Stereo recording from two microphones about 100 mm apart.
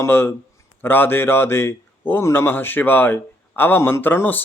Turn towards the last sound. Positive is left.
turn(degrees=20)  # may be behind; listen again after turning